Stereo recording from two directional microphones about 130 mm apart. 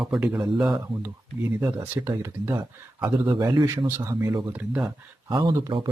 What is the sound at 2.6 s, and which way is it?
Speech, 35° right (ahead or behind).